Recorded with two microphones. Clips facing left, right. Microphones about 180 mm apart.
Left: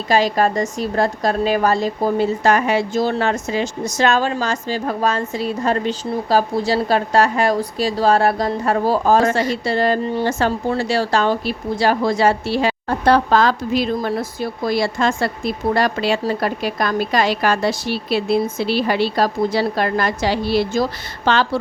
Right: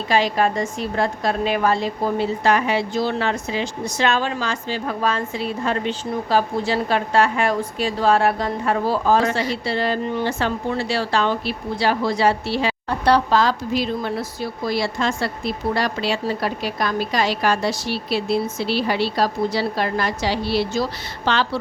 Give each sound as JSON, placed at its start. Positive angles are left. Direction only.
{"t": 0.1, "sound": "a woman's voice", "side_deg": 40}